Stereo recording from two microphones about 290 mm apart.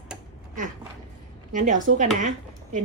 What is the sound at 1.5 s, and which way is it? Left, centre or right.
Speech, right.